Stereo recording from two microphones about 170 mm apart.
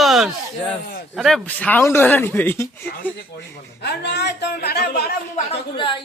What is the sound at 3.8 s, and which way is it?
A woman's voice, 80° left.